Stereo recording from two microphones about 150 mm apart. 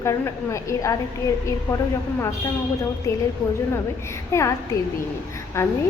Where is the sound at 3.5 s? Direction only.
20° left (ahead or behind).